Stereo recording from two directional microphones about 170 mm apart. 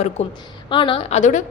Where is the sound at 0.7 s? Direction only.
30° left (ahead or behind); by 1.5 s 45° left (ahead or behind).